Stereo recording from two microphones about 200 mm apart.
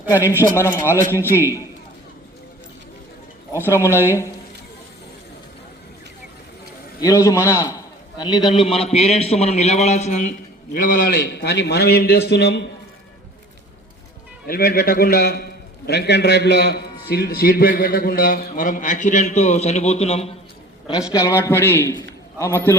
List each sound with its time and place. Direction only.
0.4 s a man's voice: 15° left (ahead or behind)
3.7 s a man's voice: 15° left (ahead or behind)
7.0 s a man's voice: 15° left (ahead or behind); by 12.7 s 55° left (ahead or behind)
14.4 s a man's voice: 50° left (ahead or behind); by 20.3 s 30° left (ahead or behind)
21.1 s a man's voice: 15° left (ahead or behind)